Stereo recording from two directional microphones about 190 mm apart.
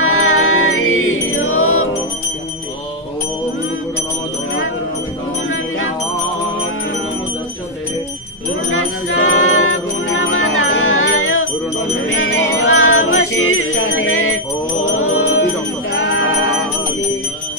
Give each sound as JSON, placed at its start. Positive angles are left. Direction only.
{"t": 0.0, "sound": "music", "side_deg": 90}
{"t": 8.6, "sound": "jingle bell", "side_deg": 90}
{"t": 12.2, "sound": "music", "side_deg": 90}
{"t": 15.0, "sound": "jingle bell", "side_deg": 90}
{"t": 15.9, "sound": "music", "side_deg": 90}